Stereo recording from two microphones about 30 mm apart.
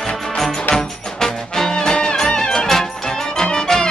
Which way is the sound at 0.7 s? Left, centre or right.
Centre.